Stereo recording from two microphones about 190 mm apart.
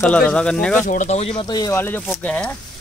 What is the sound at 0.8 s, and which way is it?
Speech, 40° left (ahead or behind).